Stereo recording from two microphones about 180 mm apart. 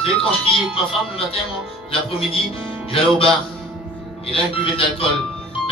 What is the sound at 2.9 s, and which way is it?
Speech, 30° left (ahead or behind).